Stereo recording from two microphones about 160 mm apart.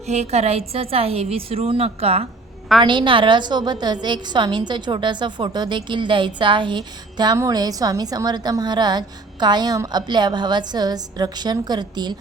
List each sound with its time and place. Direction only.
0.0 s a woman's voice: 45° right (ahead or behind); by 12.1 s 25° right (ahead or behind)